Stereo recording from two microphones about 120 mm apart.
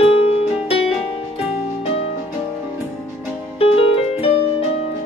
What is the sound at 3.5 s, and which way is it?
Music, 55° left (ahead or behind).